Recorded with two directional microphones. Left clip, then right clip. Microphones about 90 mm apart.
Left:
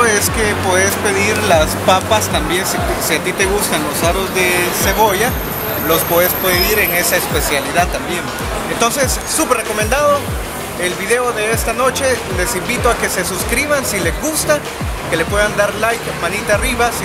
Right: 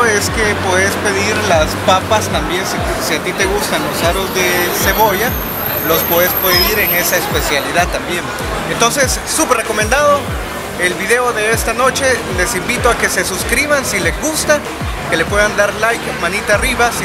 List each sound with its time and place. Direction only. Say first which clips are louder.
0.0 s speech: right 1 dB; 15° left (ahead or behind)